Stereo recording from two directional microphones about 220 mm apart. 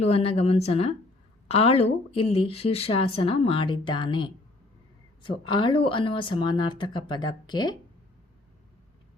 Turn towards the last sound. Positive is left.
turn(degrees=20)  # may be behind; listen again after turning